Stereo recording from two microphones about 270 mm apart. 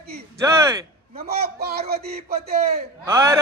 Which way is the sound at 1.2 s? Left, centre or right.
Right.